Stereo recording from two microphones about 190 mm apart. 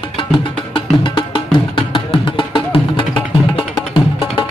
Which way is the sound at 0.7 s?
25° left (ahead or behind).